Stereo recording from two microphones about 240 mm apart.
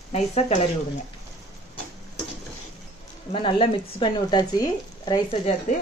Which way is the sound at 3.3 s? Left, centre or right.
Left.